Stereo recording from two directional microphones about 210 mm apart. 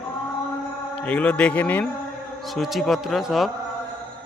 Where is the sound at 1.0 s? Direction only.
5° left (ahead or behind).